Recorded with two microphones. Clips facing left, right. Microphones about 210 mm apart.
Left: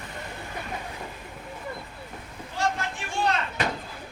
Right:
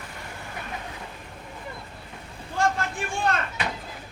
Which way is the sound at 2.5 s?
50° right (ahead or behind).